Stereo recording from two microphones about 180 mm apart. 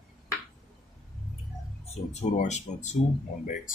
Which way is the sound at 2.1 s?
40° left (ahead or behind).